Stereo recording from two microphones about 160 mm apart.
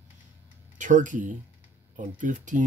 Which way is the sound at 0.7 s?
50° right (ahead or behind).